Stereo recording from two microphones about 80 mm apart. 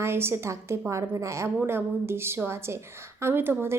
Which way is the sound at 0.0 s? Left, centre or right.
Right.